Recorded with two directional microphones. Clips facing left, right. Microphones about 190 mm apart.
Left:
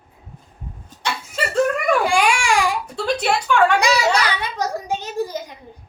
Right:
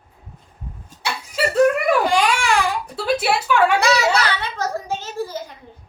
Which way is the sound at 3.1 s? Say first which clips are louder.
Right 1 dB; 5° right (ahead or behind).